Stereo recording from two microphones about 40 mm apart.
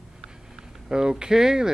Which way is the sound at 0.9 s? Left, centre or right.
Centre.